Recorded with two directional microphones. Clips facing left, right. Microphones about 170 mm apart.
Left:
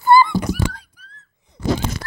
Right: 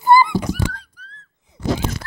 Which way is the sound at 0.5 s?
10° left (ahead or behind).